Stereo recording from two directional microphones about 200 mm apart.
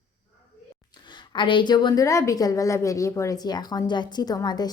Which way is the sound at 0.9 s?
20° left (ahead or behind).